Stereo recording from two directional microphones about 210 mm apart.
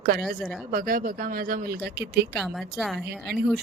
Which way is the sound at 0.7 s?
40° right (ahead or behind).